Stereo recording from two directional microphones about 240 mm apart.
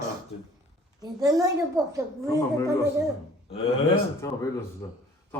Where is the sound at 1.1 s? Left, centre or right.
Centre.